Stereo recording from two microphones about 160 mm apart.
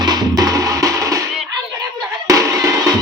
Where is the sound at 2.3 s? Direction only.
20° right (ahead or behind).